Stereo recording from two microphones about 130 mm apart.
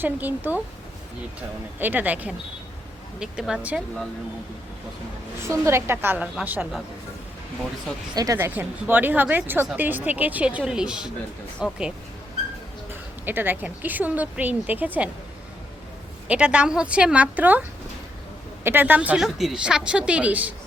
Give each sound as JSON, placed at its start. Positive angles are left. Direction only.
{"t": 0.0, "sound": "a woman's voice", "side_deg": -15}
{"t": 1.8, "sound": "a woman's voice", "side_deg": -15}
{"t": 5.4, "sound": "a woman's voice", "side_deg": -20}
{"t": 8.1, "sound": "a woman's voice", "side_deg": -25}
{"t": 16.3, "sound": "a woman's voice", "side_deg": -10}
{"t": 18.6, "sound": "a woman's voice", "side_deg": -15}